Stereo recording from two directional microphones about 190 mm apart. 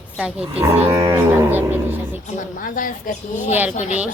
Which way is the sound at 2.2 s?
45° left (ahead or behind).